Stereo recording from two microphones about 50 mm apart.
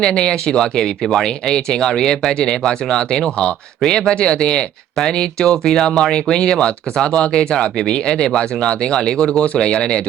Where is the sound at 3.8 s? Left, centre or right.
Centre.